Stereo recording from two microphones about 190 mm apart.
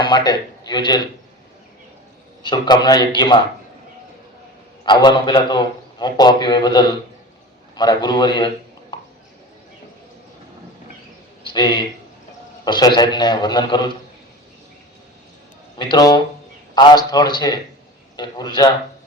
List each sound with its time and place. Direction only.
0.0 s a man's voice: 20° left (ahead or behind)
2.4 s a man's voice: 25° left (ahead or behind)
4.9 s a man's voice: 25° left (ahead or behind)
11.5 s a man's voice: 25° left (ahead or behind)
15.8 s a man's voice: 20° left (ahead or behind)